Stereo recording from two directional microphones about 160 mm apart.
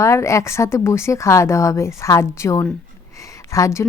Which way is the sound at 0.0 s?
20° left (ahead or behind).